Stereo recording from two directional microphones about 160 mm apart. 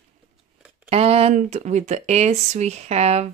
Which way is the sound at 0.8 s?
40° right (ahead or behind).